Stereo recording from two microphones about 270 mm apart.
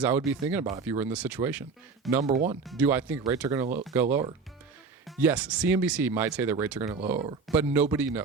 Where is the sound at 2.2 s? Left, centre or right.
Right.